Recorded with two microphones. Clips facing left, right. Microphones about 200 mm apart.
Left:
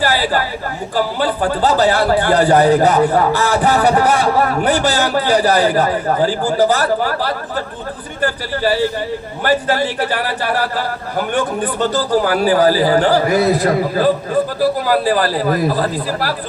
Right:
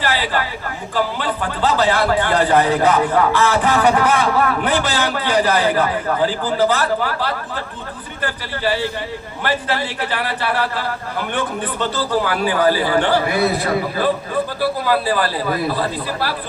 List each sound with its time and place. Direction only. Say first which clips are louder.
0.0 s a man's voice: left 4 dB; 40° left (ahead or behind)